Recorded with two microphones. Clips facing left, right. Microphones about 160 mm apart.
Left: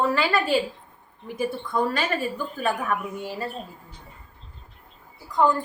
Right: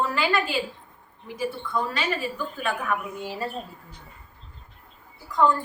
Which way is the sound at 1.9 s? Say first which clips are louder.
Left 2 dB; 45° left (ahead or behind).